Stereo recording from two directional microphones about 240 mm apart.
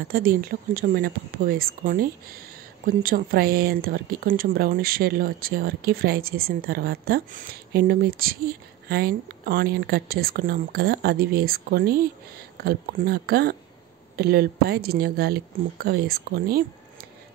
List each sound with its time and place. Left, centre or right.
0.1 s speech: right